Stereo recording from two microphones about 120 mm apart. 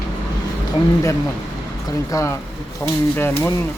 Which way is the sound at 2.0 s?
25° left (ahead or behind).